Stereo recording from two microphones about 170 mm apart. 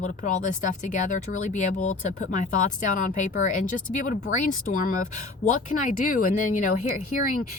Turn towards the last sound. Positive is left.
turn(degrees=45)  # may be behind; listen again after turning